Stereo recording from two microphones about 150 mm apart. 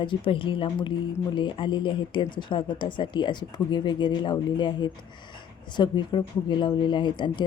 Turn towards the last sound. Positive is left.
turn(degrees=30)  # may be behind; listen again after turning